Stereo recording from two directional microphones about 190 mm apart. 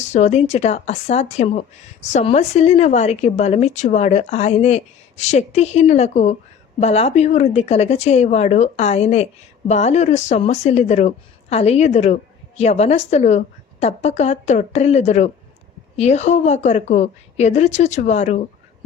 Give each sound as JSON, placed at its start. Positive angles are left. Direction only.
{"t": 0.0, "sound": "speech", "side_deg": 35}